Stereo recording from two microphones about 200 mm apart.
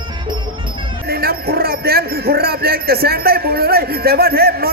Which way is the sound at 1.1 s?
50° right (ahead or behind).